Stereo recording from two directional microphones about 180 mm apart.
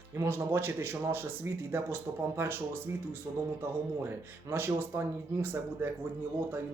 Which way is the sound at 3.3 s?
25° right (ahead or behind).